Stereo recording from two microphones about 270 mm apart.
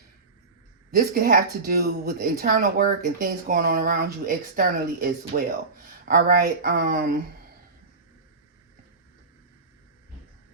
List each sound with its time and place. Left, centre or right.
0.9 s speech: right